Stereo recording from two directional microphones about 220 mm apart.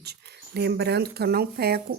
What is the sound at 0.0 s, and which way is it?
Speech, 50° right (ahead or behind).